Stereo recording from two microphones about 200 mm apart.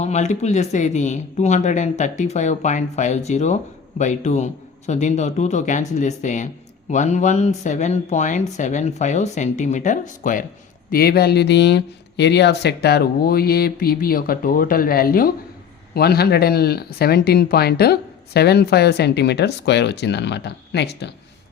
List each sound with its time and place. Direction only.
0.0 s speech: 35° left (ahead or behind); by 21.1 s 55° left (ahead or behind)